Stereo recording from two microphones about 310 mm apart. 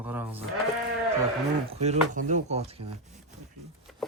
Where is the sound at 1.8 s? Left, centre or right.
Right.